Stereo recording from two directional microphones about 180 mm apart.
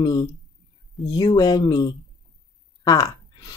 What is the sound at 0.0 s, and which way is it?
Speech, 20° left (ahead or behind).